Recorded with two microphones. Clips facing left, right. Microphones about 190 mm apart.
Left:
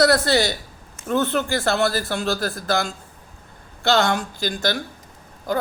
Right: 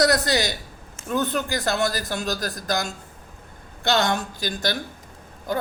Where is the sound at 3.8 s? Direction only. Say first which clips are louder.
Left 3 dB; 20° right (ahead or behind).